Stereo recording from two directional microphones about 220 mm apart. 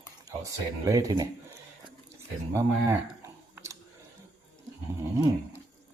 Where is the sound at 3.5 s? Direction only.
15° right (ahead or behind).